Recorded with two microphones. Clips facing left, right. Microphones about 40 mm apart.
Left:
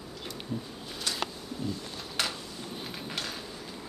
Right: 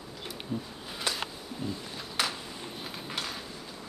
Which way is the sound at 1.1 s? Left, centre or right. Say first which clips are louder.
Right 2 dB; right.